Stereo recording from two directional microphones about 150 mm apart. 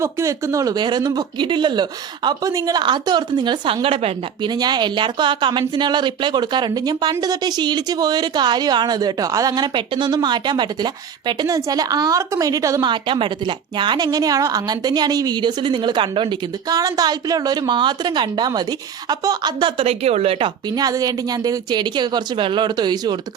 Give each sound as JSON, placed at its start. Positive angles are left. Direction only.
{"t": 0.0, "sound": "a woman's voice", "side_deg": -20}
{"t": 20.7, "sound": "speech", "side_deg": -25}